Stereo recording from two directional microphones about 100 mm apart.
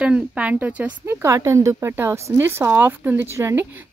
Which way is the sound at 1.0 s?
30° right (ahead or behind).